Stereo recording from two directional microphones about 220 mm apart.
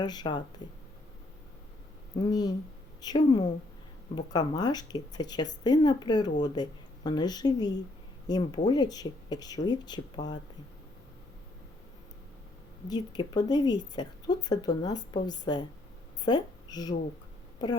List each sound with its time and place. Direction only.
0.0 s a woman's voice: 20° left (ahead or behind)
3.0 s a woman's voice: 20° left (ahead or behind)
12.9 s a woman's voice: 20° left (ahead or behind)